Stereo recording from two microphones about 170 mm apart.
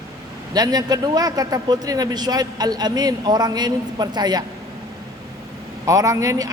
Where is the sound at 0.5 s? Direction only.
20° right (ahead or behind).